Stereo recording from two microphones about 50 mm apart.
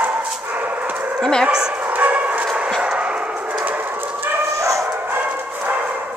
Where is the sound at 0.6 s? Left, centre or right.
Right.